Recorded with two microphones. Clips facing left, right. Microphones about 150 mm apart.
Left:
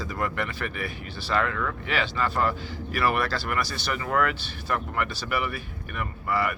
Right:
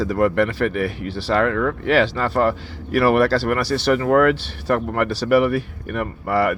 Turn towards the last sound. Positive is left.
turn(degrees=-75)  # may be behind; listen again after turning